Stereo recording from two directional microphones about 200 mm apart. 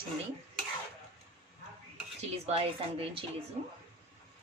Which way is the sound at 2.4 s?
30° right (ahead or behind).